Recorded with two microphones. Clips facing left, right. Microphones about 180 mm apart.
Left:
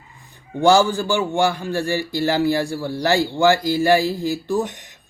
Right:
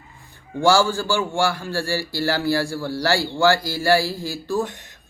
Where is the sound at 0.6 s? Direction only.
20° left (ahead or behind).